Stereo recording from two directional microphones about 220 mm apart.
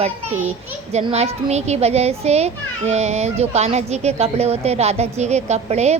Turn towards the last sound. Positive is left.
turn(degrees=-30)  # may be behind; listen again after turning